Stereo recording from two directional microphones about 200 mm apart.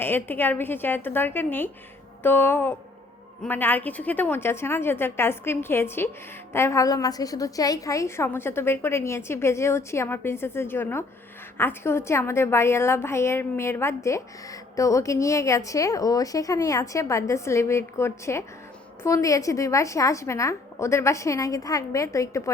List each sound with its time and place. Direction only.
0.0 s a woman's voice: 10° left (ahead or behind)